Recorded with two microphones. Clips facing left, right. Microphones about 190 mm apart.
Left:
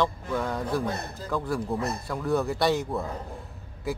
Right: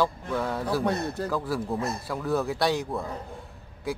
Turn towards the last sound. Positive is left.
turn(degrees=0)  # may be behind; listen again after turning